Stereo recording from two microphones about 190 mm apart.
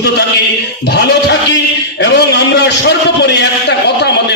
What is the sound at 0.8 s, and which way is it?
A man's voice, 60° left (ahead or behind).